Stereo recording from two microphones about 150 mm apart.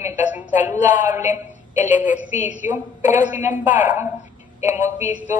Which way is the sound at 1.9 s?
10° right (ahead or behind).